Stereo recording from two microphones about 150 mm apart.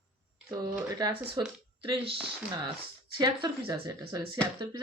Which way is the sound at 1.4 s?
35° right (ahead or behind).